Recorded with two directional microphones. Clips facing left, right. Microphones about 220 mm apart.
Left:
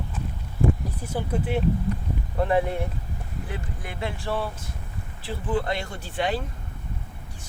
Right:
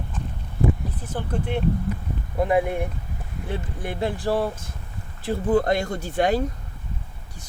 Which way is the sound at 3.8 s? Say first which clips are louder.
Right 8 dB; 45° right (ahead or behind).